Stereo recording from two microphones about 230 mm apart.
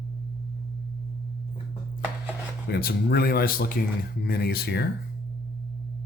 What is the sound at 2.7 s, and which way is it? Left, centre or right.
Speech, left.